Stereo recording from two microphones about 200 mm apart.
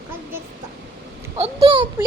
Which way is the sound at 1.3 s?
30° right (ahead or behind).